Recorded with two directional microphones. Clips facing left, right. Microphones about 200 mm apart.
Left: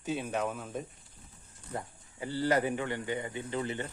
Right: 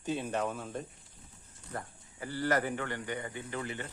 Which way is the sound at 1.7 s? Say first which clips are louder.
Left 2 dB; 20° left (ahead or behind).